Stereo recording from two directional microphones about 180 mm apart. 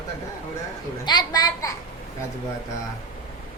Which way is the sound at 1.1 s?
20° left (ahead or behind).